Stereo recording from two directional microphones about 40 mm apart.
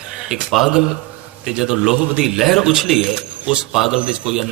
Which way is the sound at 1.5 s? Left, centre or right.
Centre.